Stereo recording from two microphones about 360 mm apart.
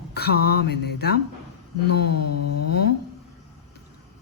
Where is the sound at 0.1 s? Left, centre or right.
Left.